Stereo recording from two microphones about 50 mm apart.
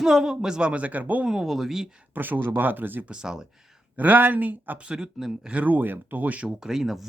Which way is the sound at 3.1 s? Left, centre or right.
Centre.